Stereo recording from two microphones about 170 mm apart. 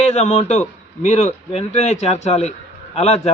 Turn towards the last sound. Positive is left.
turn(degrees=35)  # may be behind; listen again after turning